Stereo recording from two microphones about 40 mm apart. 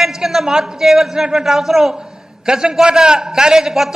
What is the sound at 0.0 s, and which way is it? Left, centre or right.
A man's voice, centre.